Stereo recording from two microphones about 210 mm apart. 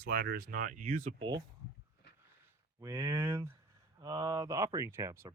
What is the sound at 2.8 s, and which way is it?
Speech, 10° right (ahead or behind).